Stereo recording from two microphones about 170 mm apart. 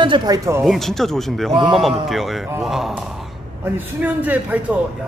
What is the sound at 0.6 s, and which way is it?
A man's voice, centre (ahead or behind).